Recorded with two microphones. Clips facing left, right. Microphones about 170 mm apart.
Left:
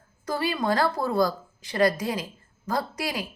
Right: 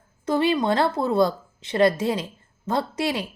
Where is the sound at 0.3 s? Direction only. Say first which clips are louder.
Right 5 dB; 25° right (ahead or behind).